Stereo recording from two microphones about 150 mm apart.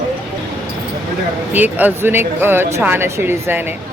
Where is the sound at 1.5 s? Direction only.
10° right (ahead or behind).